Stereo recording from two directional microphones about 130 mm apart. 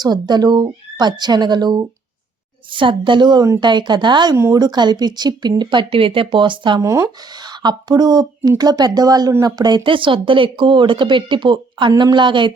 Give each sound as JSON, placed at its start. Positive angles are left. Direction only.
{"t": 0.0, "sound": "speech", "side_deg": -35}
{"t": 4.4, "sound": "speech", "side_deg": -20}
{"t": 4.6, "sound": "speech", "side_deg": -35}
{"t": 6.8, "sound": "speech", "side_deg": -25}